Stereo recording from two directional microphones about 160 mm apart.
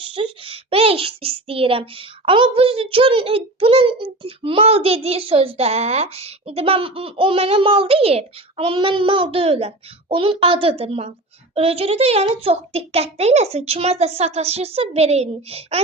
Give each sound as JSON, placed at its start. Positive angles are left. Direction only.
{"t": 0.1, "sound": "a child's voice", "side_deg": -35}